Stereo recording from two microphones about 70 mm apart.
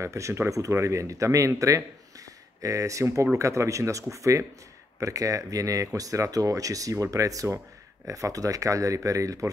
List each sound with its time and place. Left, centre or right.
0.0 s speech: right